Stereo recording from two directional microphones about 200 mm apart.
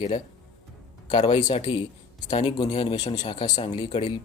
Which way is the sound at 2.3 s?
35° left (ahead or behind).